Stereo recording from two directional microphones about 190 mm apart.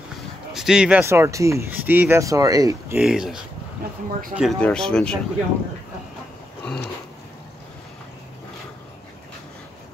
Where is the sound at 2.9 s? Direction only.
5° right (ahead or behind).